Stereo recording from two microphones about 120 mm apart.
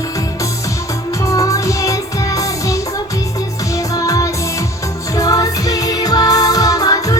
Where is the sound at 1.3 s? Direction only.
25° left (ahead or behind).